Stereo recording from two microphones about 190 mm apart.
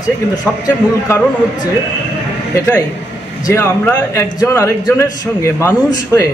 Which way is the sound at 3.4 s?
10° left (ahead or behind).